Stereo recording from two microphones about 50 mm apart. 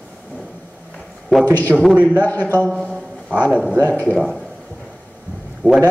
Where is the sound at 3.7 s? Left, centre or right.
Left.